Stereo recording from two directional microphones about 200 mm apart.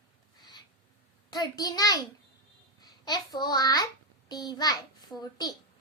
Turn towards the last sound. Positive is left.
turn(degrees=20)  # may be behind; listen again after turning